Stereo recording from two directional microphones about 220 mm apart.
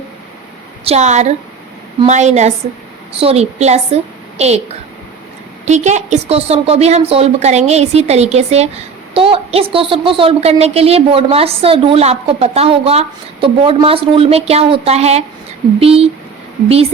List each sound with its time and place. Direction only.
0.9 s a woman's voice: 30° right (ahead or behind)
5.6 s a woman's voice: 30° right (ahead or behind)